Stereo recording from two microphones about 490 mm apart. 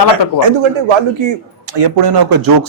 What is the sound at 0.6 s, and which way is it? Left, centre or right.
Speech, right.